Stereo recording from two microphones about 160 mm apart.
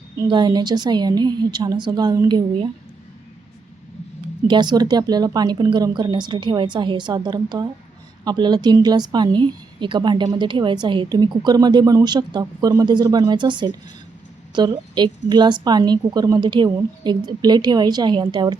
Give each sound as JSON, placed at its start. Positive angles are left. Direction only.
{"t": 0.2, "sound": "a woman's voice", "side_deg": -30}
{"t": 4.4, "sound": "a woman's voice", "side_deg": -30}